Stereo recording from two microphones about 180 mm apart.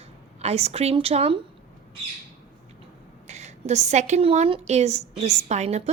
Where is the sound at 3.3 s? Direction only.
40° right (ahead or behind).